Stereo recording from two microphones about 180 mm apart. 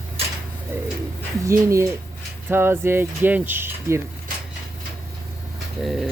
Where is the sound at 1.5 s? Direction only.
15° right (ahead or behind).